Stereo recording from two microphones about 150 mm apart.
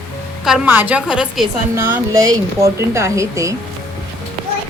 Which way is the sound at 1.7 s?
15° right (ahead or behind).